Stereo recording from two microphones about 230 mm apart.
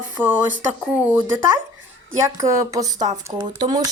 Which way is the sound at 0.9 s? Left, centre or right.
Centre.